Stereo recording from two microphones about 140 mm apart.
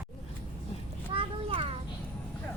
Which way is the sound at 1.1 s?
40° right (ahead or behind).